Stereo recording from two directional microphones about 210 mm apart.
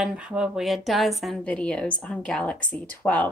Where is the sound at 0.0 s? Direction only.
5° right (ahead or behind).